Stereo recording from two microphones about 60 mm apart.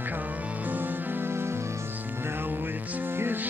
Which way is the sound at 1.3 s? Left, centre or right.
Right.